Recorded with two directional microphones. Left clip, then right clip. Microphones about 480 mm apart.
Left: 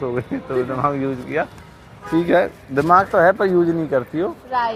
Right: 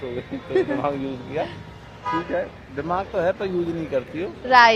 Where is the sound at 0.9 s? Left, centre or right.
Left.